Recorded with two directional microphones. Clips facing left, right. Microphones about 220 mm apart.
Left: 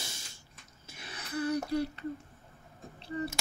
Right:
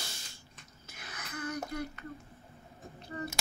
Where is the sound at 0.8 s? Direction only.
30° left (ahead or behind).